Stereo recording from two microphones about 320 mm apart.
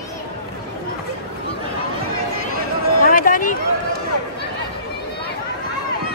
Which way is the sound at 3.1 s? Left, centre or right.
Left.